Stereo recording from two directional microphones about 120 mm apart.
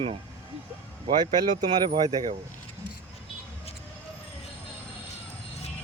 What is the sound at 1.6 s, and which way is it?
Speech, 40° right (ahead or behind).